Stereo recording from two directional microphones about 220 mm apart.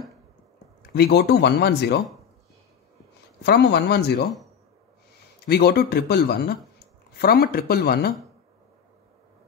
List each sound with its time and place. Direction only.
0.9 s speech: 45° left (ahead or behind)
3.4 s speech: 50° left (ahead or behind)
5.5 s speech: 45° left (ahead or behind)